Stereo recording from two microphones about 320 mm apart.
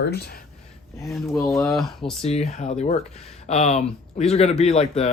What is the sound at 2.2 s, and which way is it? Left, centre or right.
Speech, centre.